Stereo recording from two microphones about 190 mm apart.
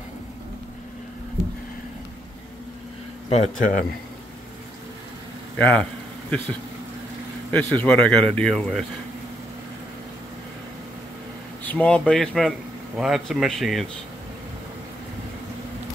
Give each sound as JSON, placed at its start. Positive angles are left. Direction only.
{"t": 3.3, "sound": "speech", "side_deg": 40}
{"t": 5.6, "sound": "speech", "side_deg": 10}
{"t": 7.5, "sound": "speech", "side_deg": 10}
{"t": 11.6, "sound": "speech", "side_deg": 5}